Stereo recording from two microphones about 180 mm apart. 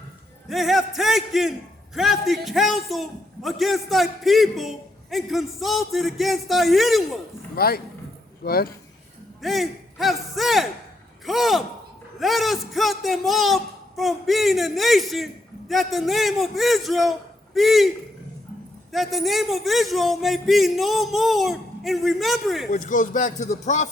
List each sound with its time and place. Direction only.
0.4 s a man's voice: centre (ahead or behind)
7.5 s speech: 55° left (ahead or behind)
9.4 s a man's voice: centre (ahead or behind)
22.7 s speech: 45° left (ahead or behind)